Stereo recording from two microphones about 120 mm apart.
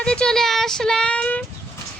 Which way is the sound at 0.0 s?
5° left (ahead or behind).